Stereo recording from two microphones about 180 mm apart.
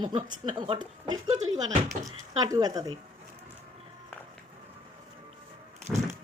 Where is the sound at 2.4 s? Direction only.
20° right (ahead or behind).